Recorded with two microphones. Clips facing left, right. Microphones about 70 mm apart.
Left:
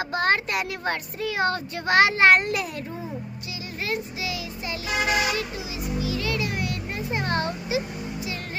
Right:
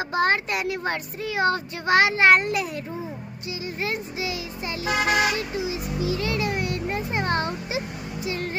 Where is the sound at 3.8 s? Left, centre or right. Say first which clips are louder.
Even; right.